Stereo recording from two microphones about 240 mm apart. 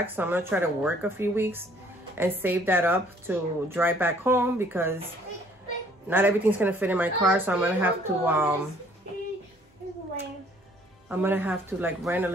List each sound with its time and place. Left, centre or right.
0.0 s speech: centre
11.1 s speech: centre